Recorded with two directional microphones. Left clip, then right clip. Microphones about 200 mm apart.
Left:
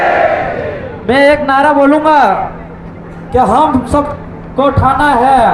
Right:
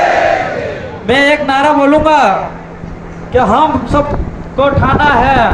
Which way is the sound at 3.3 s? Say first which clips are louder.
Left 1 dB; 10° left (ahead or behind).